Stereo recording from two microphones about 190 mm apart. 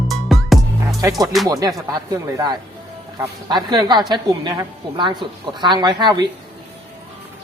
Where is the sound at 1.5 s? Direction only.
20° right (ahead or behind).